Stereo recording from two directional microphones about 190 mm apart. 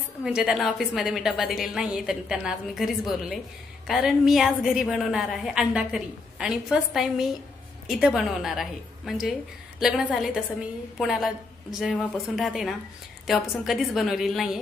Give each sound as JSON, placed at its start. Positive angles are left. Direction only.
{"t": 0.2, "sound": "a woman's voice", "side_deg": -5}